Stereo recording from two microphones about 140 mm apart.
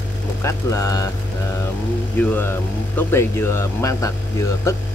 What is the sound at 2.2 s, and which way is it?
Speech, 15° left (ahead or behind).